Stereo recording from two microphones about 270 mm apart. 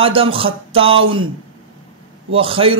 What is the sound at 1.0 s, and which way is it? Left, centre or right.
Speech, right.